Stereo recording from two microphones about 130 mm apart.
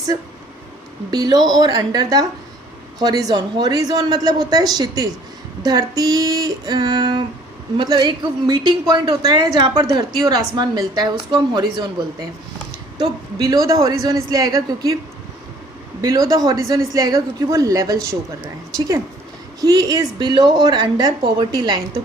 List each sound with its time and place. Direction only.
1.1 s a woman's voice: 30° right (ahead or behind)
16.0 s a man's voice: 30° right (ahead or behind)